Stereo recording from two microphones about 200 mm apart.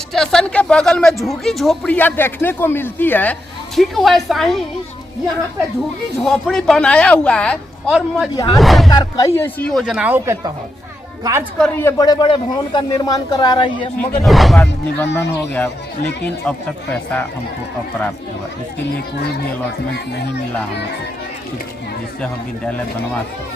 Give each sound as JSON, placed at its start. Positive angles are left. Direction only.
{"t": 0.1, "sound": "speech", "side_deg": 0}
{"t": 6.2, "sound": "speech", "side_deg": 0}
{"t": 8.9, "sound": "a woman's voice", "side_deg": 20}
{"t": 11.6, "sound": "a man's voice", "side_deg": 10}
{"t": 14.0, "sound": "speech", "side_deg": 10}